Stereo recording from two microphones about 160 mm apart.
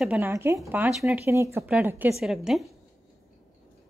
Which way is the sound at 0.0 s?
10° right (ahead or behind).